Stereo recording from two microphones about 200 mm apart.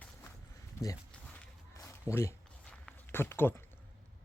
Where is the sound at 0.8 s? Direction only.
15° left (ahead or behind).